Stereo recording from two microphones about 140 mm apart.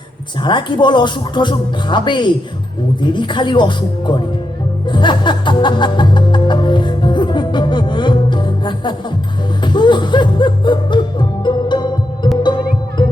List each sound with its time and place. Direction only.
0.4 s speech: 35° left (ahead or behind)
4.9 s music: 35° left (ahead or behind)